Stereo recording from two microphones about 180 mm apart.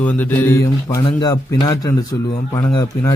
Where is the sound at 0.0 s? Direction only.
10° left (ahead or behind).